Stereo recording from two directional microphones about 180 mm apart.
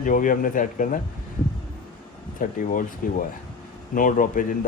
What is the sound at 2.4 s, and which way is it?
A man's voice, 50° left (ahead or behind).